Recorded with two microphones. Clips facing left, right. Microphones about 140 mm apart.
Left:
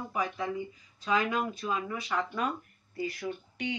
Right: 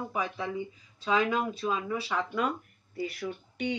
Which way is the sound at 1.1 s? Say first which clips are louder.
Right 2 dB; centre (ahead or behind).